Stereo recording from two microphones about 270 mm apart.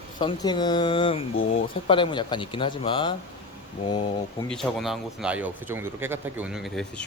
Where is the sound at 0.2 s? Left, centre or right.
Centre.